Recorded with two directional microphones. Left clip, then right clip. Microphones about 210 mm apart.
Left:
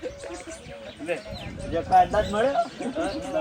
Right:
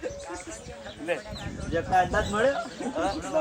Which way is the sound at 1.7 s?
15° left (ahead or behind).